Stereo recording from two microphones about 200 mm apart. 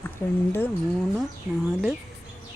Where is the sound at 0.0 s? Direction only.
10° left (ahead or behind).